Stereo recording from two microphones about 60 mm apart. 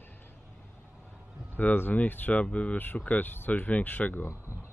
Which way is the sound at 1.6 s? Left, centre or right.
Left.